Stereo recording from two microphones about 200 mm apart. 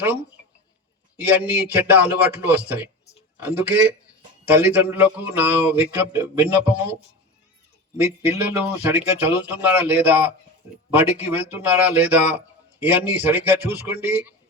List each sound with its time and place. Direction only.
1.1 s speech: 10° right (ahead or behind)
7.9 s speech: 10° right (ahead or behind)